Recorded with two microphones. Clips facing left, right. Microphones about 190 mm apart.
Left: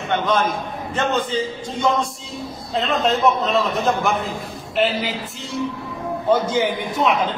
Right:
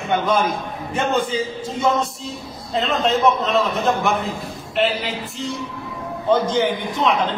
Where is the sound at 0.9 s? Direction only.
10° right (ahead or behind).